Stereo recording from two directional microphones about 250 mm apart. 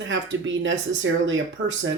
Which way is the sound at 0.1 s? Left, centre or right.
Right.